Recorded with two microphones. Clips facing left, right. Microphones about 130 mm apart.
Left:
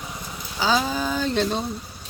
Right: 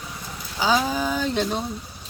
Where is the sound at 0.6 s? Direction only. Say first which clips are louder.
Right 1 dB; 10° right (ahead or behind).